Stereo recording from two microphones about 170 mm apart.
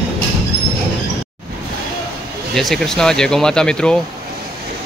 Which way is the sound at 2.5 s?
Centre (ahead or behind).